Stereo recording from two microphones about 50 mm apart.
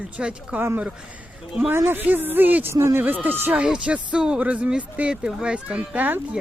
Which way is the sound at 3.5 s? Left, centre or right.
Right.